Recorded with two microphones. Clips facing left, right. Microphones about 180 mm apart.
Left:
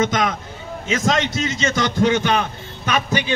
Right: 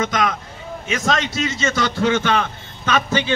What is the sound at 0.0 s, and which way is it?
A man's voice, 25° left (ahead or behind).